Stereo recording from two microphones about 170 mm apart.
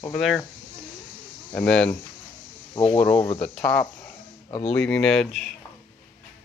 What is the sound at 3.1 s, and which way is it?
Speech, 35° left (ahead or behind).